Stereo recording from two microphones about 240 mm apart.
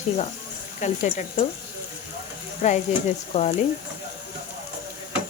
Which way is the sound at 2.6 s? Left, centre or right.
Left.